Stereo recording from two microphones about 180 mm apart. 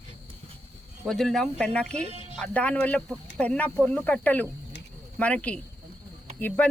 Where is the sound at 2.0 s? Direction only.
35° right (ahead or behind).